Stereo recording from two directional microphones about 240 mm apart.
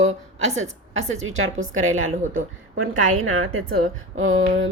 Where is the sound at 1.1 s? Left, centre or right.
Right.